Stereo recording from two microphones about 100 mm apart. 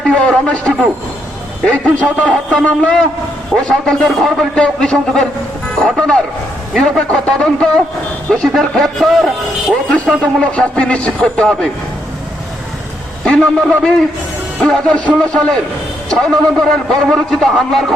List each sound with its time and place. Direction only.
0.3 s a man's voice: 10° left (ahead or behind)
13.2 s a man's voice: 10° left (ahead or behind)